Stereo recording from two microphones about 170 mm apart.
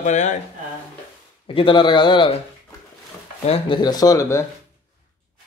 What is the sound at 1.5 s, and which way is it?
Speech, 30° left (ahead or behind).